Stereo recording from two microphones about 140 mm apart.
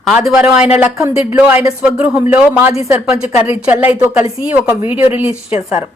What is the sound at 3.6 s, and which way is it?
A woman's voice, 10° right (ahead or behind).